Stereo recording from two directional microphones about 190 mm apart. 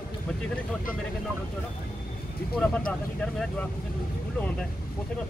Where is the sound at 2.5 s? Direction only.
5° left (ahead or behind).